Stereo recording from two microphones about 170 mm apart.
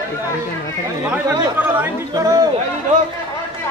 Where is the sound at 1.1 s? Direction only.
10° right (ahead or behind).